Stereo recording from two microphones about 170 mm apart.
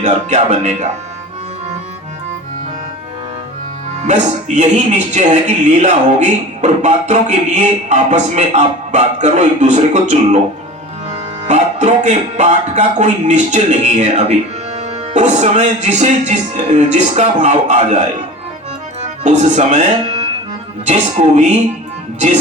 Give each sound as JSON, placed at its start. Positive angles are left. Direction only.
{"t": 0.0, "sound": "speech", "side_deg": -45}
{"t": 4.0, "sound": "speech", "side_deg": -45}
{"t": 11.1, "sound": "music", "side_deg": -45}
{"t": 14.8, "sound": "speech", "side_deg": -45}
{"t": 19.0, "sound": "speech", "side_deg": -45}